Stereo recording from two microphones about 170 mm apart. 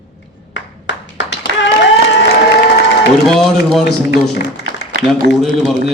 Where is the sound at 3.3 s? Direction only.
5° left (ahead or behind).